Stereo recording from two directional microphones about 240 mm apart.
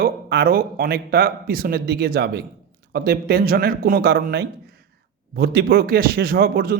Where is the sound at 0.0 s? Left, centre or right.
Right.